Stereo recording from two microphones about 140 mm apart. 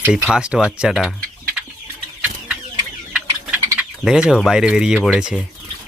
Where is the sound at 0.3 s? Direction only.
5° right (ahead or behind).